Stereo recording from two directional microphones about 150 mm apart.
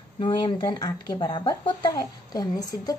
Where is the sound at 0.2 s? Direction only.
30° left (ahead or behind).